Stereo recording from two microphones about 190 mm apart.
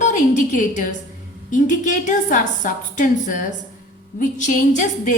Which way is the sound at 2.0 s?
45° left (ahead or behind).